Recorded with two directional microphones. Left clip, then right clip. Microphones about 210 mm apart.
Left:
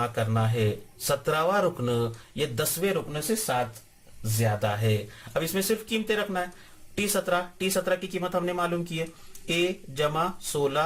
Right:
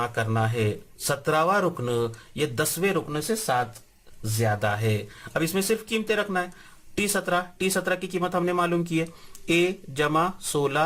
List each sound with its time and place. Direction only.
0.0 s speech: 30° right (ahead or behind)
4.4 s speech: 30° right (ahead or behind)